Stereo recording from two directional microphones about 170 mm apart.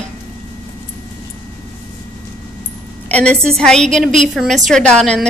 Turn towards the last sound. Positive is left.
turn(degrees=5)  # may be behind; listen again after turning